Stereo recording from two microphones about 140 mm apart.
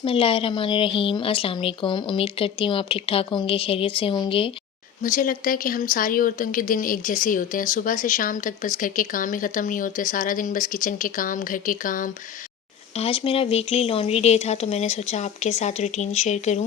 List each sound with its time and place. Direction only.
0.0 s a woman's voice: 40° left (ahead or behind)
5.0 s speech: 70° left (ahead or behind)
13.0 s speech: 40° left (ahead or behind)